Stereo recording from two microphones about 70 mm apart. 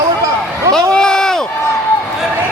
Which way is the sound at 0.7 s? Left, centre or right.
Centre.